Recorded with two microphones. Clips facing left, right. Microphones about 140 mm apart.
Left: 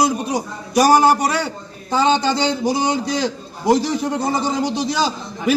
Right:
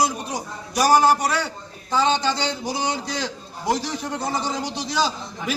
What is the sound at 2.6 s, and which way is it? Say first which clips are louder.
Speech: left 7 dB; 50° left (ahead or behind).